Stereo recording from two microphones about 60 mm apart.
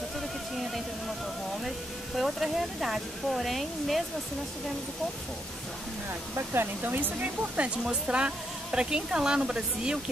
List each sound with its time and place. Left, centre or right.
2.1 s speech: centre
6.3 s speech: right; by 9.9 s centre